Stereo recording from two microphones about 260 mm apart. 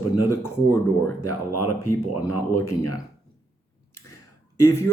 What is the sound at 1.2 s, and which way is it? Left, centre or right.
Speech, left.